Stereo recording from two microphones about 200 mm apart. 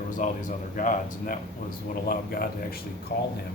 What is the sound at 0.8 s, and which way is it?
Speech, 40° left (ahead or behind).